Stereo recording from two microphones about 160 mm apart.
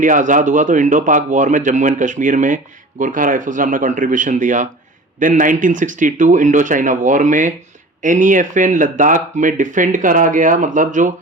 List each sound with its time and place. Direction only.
0.0 s speech: 55° right (ahead or behind)